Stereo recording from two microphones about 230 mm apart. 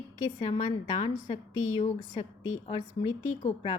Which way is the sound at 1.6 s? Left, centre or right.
Left.